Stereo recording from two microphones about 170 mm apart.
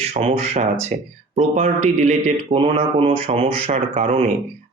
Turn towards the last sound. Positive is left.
turn(degrees=-35)  # may be behind; listen again after turning